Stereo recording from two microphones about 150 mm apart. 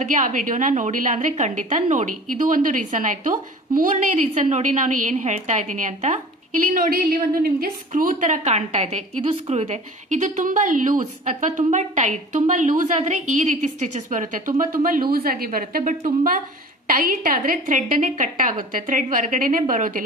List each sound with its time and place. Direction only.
0.0 s a woman's voice: 60° right (ahead or behind)
6.7 s a woman's voice: 80° right; by 20.0 s 65° right (ahead or behind)